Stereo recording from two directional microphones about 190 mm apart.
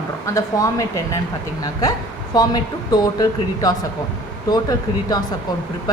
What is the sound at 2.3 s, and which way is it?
Speech, 20° left (ahead or behind).